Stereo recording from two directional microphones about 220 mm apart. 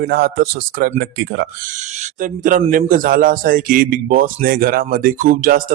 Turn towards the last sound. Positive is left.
turn(degrees=-40)  # may be behind; listen again after turning